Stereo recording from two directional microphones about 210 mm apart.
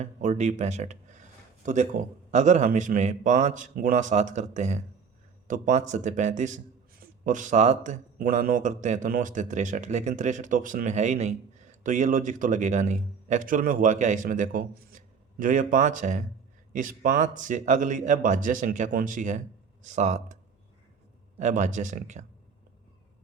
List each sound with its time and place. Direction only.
0.0 s speech: 35° right (ahead or behind)
21.3 s speech: 35° right (ahead or behind)